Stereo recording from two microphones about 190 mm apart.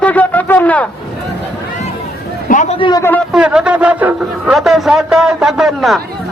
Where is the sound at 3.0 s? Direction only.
10° left (ahead or behind).